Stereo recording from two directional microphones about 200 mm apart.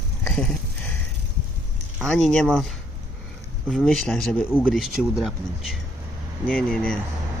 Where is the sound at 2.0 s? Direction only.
Centre (ahead or behind).